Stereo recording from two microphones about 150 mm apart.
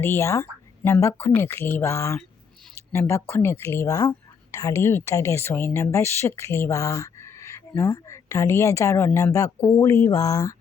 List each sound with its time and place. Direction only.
0.0 s speech: 15° left (ahead or behind)